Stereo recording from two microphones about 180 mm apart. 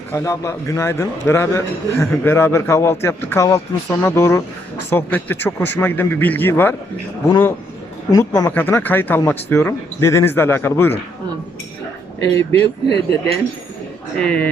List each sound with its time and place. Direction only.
0.1 s a man's voice: 15° left (ahead or behind)
12.9 s speech: 65° left (ahead or behind)
14.2 s a man's voice: 5° left (ahead or behind)